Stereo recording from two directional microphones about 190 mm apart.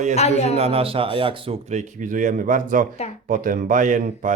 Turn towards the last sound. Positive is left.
turn(degrees=-40)  # may be behind; listen again after turning